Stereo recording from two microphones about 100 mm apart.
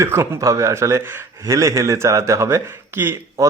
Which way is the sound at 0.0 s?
30° right (ahead or behind).